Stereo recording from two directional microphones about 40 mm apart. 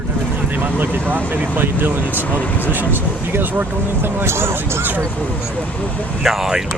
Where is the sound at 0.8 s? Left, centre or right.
Right.